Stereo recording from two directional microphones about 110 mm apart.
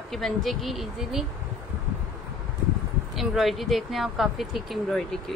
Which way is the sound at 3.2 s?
Centre (ahead or behind).